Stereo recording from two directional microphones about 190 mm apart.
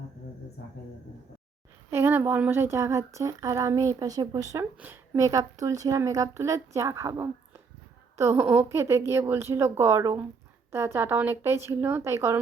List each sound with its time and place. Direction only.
1.9 s speech: 10° right (ahead or behind)